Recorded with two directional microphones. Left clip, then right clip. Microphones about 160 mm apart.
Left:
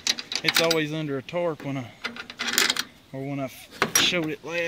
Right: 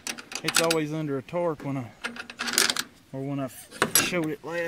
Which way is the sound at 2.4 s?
40° right (ahead or behind).